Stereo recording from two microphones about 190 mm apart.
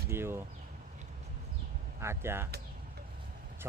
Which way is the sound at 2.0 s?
15° right (ahead or behind).